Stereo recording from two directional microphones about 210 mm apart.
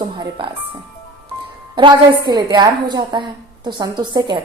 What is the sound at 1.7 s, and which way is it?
A woman's voice, 20° right (ahead or behind).